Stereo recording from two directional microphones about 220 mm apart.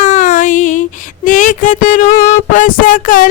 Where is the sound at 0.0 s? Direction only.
35° left (ahead or behind).